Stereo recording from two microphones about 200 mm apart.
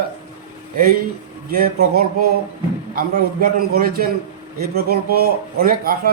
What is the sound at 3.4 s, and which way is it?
Speech, 45° right (ahead or behind).